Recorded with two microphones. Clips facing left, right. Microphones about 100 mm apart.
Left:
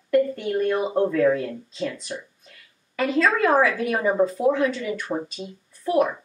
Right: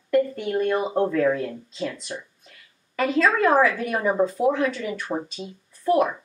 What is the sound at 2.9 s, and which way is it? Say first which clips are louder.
Speech: even; centre (ahead or behind).